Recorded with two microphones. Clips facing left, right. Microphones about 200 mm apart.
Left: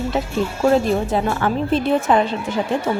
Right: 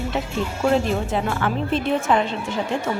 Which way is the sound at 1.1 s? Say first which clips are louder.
Left 3 dB; 35° left (ahead or behind).